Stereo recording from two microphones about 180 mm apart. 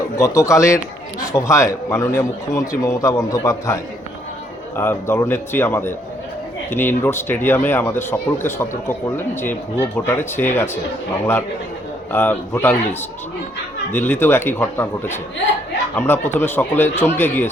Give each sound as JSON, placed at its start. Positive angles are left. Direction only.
{"t": 0.2, "sound": "a man's voice", "side_deg": 15}
{"t": 4.8, "sound": "a man's voice", "side_deg": 15}
{"t": 12.1, "sound": "a man's voice", "side_deg": 10}